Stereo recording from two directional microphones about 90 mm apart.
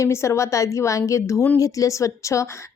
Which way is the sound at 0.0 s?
30° left (ahead or behind).